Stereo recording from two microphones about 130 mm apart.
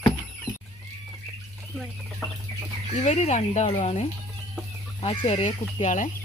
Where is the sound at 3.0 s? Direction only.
65° left (ahead or behind).